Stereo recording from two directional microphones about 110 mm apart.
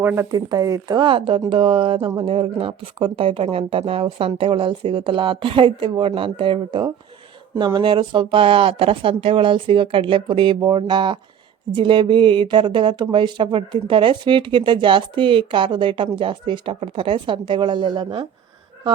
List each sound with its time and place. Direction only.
0.0 s speech: 20° right (ahead or behind)
0.3 s speech: 35° right (ahead or behind)
0.9 s speech: 50° right (ahead or behind)